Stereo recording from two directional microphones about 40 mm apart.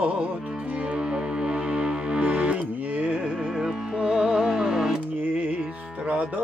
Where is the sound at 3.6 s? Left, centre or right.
Centre.